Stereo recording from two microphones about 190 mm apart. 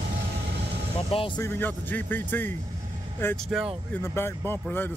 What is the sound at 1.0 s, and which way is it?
Speech, 30° left (ahead or behind).